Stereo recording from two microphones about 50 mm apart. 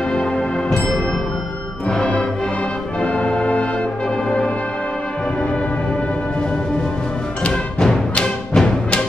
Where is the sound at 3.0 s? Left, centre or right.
Left.